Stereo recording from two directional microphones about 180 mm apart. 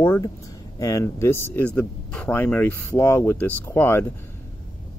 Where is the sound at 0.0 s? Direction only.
15° left (ahead or behind).